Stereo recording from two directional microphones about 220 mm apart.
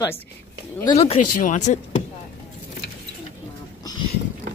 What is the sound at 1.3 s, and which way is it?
Speech, 35° left (ahead or behind).